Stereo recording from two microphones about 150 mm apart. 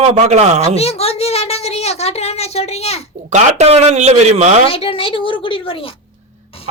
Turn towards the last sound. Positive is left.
turn(degrees=35)  # may be behind; listen again after turning